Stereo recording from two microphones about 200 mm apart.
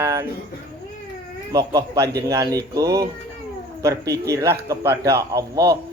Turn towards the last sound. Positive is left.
turn(degrees=-15)  # may be behind; listen again after turning